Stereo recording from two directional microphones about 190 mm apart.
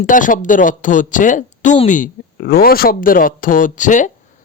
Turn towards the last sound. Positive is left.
turn(degrees=40)  # may be behind; listen again after turning